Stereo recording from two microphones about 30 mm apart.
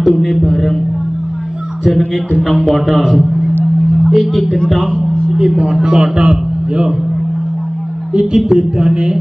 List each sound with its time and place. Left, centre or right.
0.0 s a man's voice: centre
2.4 s a man's voice: centre
4.1 s a man's voice: centre
4.9 s music: left
5.8 s a man's voice: right
8.1 s a man's voice: right